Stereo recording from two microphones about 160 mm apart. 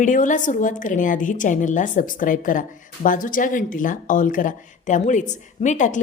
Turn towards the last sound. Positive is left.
turn(degrees=50)  # may be behind; listen again after turning